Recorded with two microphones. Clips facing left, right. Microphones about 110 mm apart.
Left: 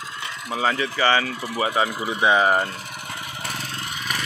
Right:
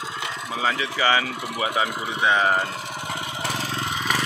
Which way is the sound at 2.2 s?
15° left (ahead or behind).